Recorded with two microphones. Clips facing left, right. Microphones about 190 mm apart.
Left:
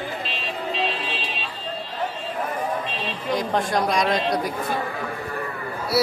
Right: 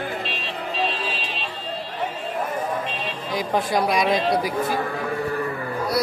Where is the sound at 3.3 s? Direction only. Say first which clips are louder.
Even; 5° right (ahead or behind).